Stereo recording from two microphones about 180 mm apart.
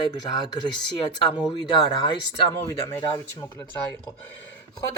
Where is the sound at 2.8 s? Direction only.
20° left (ahead or behind).